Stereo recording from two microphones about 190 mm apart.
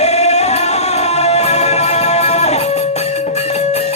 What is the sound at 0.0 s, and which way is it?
Music, 35° left (ahead or behind).